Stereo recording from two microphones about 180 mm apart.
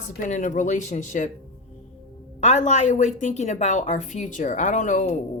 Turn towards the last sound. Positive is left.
turn(degrees=45)  # may be behind; listen again after turning